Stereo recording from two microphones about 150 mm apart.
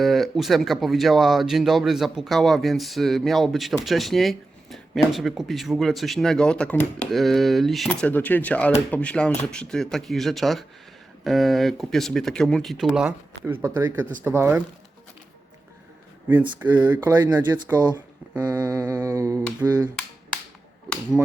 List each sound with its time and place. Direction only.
0.0 s speech: centre (ahead or behind)
16.6 s speech: 10° right (ahead or behind)